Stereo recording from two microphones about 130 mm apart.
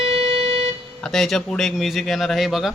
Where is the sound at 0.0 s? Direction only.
45° right (ahead or behind).